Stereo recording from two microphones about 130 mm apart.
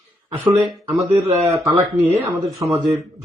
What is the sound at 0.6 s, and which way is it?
Speech, centre (ahead or behind).